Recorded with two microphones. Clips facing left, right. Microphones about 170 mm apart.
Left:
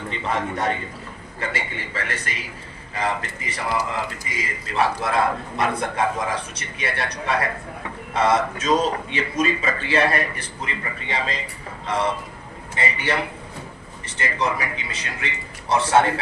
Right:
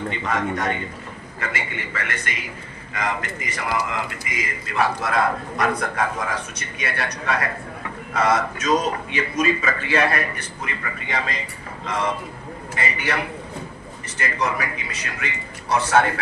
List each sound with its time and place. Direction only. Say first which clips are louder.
0.3 s a man's voice: left 1 dB; 30° left (ahead or behind)
12.7 s a man's voice: left 1 dB; 25° left (ahead or behind)
14.2 s a man's voice: even; 25° left (ahead or behind)